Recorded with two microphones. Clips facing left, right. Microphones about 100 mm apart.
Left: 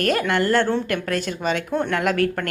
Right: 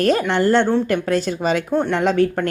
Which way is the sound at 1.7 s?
20° right (ahead or behind).